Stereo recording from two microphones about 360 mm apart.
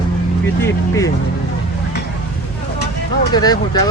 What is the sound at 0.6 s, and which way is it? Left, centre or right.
Speech, centre.